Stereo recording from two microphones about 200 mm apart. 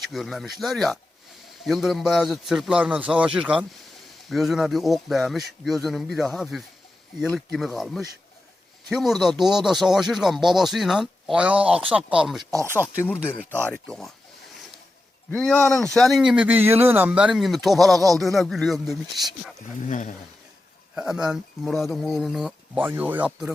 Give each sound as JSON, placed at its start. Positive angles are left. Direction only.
{"t": 0.1, "sound": "speech", "side_deg": 0}
{"t": 12.5, "sound": "speech", "side_deg": -15}
{"t": 13.0, "sound": "speech", "side_deg": 10}
{"t": 15.3, "sound": "speech", "side_deg": 5}
{"t": 19.8, "sound": "speech", "side_deg": 40}
{"t": 20.9, "sound": "speech", "side_deg": -5}